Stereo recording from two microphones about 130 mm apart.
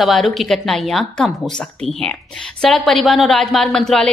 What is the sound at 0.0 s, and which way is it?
Speech, centre (ahead or behind).